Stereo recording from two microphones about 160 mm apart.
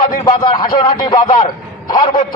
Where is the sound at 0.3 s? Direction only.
30° left (ahead or behind).